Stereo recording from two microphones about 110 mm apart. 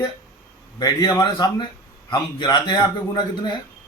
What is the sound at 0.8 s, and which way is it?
A man's voice, 35° left (ahead or behind).